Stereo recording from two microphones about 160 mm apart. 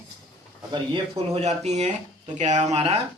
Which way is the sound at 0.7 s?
35° right (ahead or behind).